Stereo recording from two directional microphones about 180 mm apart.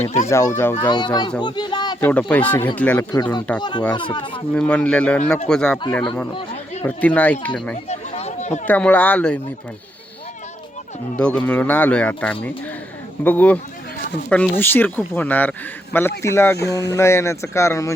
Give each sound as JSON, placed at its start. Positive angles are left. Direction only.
{"t": 0.0, "sound": "a child's voice", "side_deg": 40}
{"t": 0.3, "sound": "speech", "side_deg": 15}
{"t": 0.9, "sound": "a child's voice", "side_deg": 25}
{"t": 1.4, "sound": "a sound", "side_deg": 25}
{"t": 2.0, "sound": "speech", "side_deg": 10}
{"t": 3.6, "sound": "a child's voice", "side_deg": 25}
{"t": 4.5, "sound": "speech", "side_deg": 5}
{"t": 6.8, "sound": "speech", "side_deg": 10}
{"t": 7.9, "sound": "chatter", "side_deg": 35}
{"t": 8.6, "sound": "speech", "side_deg": 10}
{"t": 11.2, "sound": "speech", "side_deg": 5}